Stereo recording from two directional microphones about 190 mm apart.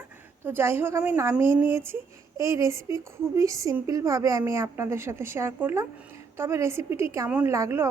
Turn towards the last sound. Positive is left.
turn(degrees=-15)  # may be behind; listen again after turning